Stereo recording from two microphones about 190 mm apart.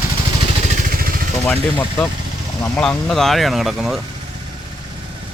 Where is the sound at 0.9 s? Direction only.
50° right (ahead or behind).